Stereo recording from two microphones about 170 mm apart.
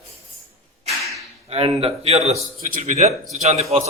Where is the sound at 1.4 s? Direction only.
35° right (ahead or behind).